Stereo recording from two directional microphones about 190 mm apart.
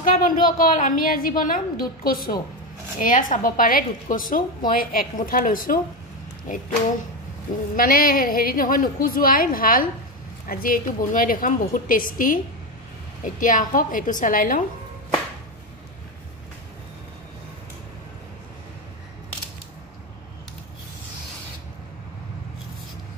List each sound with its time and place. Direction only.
0.0 s a woman's voice: 45° left (ahead or behind)
7.7 s a woman's voice: 50° left (ahead or behind)